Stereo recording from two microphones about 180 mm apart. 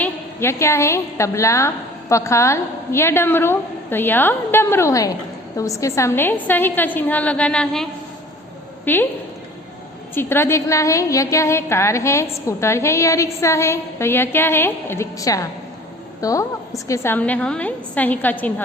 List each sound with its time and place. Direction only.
0.0 s a woman's voice: 15° left (ahead or behind)
10.2 s a woman's voice: 10° left (ahead or behind)